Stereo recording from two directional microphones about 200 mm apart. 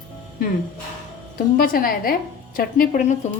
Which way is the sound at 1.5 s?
45° left (ahead or behind).